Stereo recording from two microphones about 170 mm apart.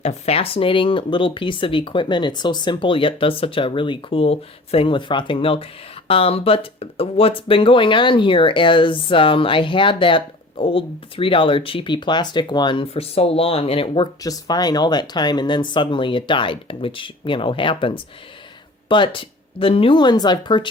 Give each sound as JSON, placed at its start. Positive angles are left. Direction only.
{"t": 0.0, "sound": "speech", "side_deg": 35}